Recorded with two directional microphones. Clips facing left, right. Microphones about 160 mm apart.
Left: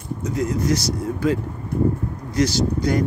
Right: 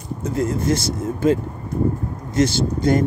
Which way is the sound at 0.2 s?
30° right (ahead or behind).